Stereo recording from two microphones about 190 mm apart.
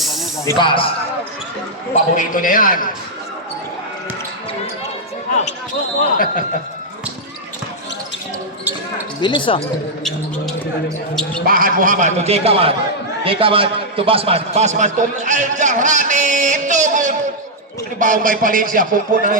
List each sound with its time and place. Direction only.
0.4 s speech: 25° left (ahead or behind)
2.1 s a man's voice: 45° left (ahead or behind)
6.0 s a man's voice: 45° left (ahead or behind)
9.2 s speech: 25° left (ahead or behind)
11.1 s speech: centre (ahead or behind)
11.4 s a man's voice: 50° right (ahead or behind)